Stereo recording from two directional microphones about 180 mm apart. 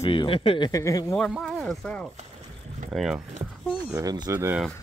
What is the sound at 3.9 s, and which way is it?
Speech, 20° right (ahead or behind).